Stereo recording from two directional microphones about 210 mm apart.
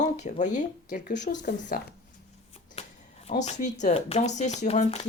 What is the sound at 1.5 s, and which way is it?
Speech, 55° left (ahead or behind).